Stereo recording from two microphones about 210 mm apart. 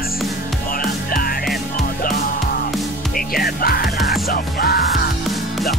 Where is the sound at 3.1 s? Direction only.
45° left (ahead or behind).